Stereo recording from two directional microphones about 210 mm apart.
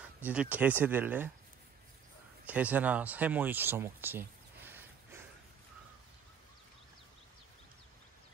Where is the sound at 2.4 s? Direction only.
5° right (ahead or behind).